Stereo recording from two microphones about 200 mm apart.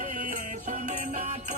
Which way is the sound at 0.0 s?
40° right (ahead or behind).